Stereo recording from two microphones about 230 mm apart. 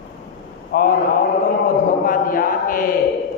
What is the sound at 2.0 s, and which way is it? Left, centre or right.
Speech, left.